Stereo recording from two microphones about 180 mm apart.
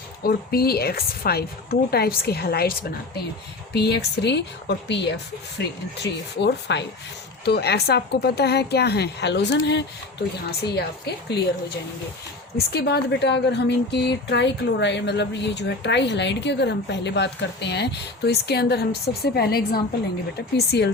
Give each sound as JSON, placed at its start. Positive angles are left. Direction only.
{"t": 0.2, "sound": "a woman's voice", "side_deg": 60}
{"t": 12.5, "sound": "a woman's voice", "side_deg": 65}